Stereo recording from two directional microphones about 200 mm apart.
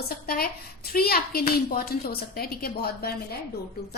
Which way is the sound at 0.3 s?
50° left (ahead or behind).